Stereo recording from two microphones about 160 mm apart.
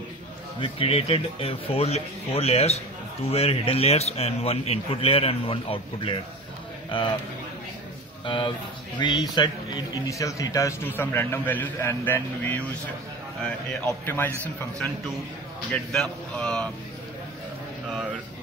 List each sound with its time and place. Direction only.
0.6 s a man's voice: 35° left (ahead or behind)
8.3 s a man's voice: 30° left (ahead or behind); by 16.6 s 5° left (ahead or behind)